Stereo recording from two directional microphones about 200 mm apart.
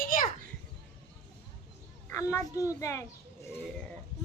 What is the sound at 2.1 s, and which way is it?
Speech, 15° left (ahead or behind).